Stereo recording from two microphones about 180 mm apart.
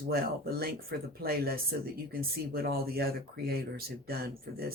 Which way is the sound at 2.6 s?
60° right (ahead or behind).